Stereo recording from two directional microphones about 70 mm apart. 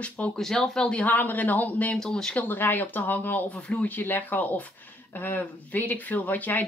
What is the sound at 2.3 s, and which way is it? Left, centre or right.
Speech, left.